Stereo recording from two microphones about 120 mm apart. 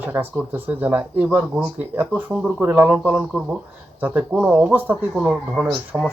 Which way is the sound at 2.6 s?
15° right (ahead or behind).